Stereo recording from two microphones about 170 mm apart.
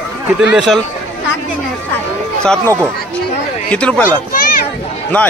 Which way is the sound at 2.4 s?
5° left (ahead or behind).